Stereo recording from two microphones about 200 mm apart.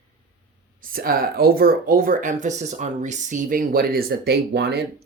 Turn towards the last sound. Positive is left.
turn(degrees=-55)  # may be behind; listen again after turning